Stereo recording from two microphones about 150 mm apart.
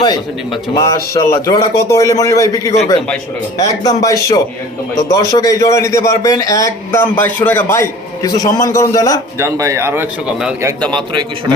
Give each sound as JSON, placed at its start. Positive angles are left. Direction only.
{"t": 0.7, "sound": "a man's voice", "side_deg": 20}
{"t": 9.4, "sound": "a man's voice", "side_deg": -20}
{"t": 10.9, "sound": "a man's voice", "side_deg": -30}